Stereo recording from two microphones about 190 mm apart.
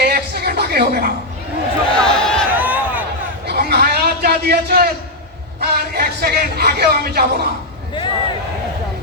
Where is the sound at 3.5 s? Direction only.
55° right (ahead or behind).